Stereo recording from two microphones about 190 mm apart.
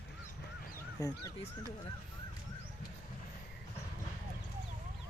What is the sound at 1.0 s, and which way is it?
Speech, 20° left (ahead or behind).